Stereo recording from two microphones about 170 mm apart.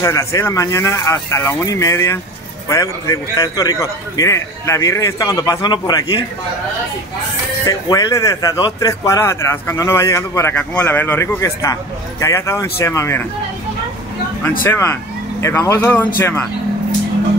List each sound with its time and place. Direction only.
0.0 s a man's voice: 20° left (ahead or behind)
7.6 s speech: 20° left (ahead or behind)
14.6 s speech: 15° left (ahead or behind)